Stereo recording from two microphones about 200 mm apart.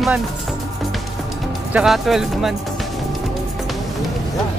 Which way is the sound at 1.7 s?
5° right (ahead or behind).